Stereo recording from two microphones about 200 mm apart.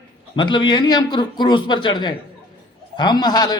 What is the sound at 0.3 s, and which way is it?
A man's voice, 25° left (ahead or behind).